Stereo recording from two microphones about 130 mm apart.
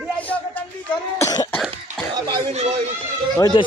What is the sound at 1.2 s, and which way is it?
Cough, 25° left (ahead or behind).